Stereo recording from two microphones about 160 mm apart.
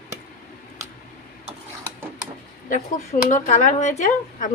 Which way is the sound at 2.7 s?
50° left (ahead or behind).